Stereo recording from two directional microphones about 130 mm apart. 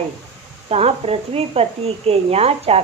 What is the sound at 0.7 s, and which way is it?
A woman's voice, 50° right (ahead or behind).